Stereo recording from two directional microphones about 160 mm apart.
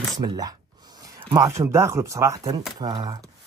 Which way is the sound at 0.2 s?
25° right (ahead or behind).